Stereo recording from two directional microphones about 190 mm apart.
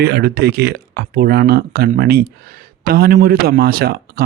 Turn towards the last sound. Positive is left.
turn(degrees=-50)  # may be behind; listen again after turning